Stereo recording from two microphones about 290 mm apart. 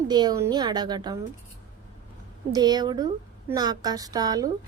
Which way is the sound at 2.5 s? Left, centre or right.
Centre.